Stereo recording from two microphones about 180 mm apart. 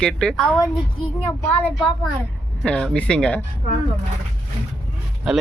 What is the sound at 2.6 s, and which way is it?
Speech, 5° left (ahead or behind).